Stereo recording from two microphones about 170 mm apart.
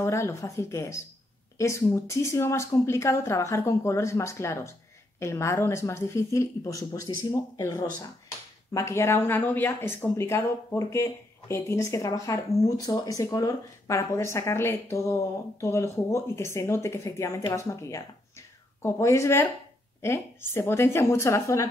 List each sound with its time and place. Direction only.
0.0 s speech: 15° left (ahead or behind)